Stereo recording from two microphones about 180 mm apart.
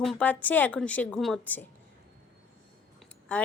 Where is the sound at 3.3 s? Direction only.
5° left (ahead or behind).